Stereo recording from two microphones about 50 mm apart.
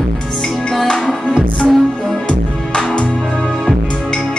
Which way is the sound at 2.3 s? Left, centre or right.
Left.